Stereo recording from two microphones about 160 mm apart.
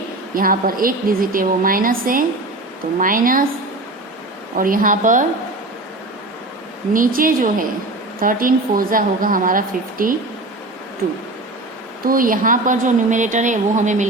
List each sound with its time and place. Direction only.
0.3 s a woman's voice: 60° right (ahead or behind)
4.5 s a woman's voice: 60° right (ahead or behind)
6.9 s a woman's voice: 60° right (ahead or behind)
12.0 s a woman's voice: 60° right (ahead or behind)